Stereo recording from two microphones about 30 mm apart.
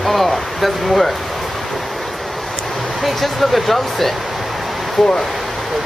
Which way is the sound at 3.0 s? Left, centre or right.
Centre.